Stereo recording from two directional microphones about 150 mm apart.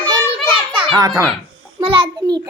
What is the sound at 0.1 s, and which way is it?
Children playing, 35° right (ahead or behind).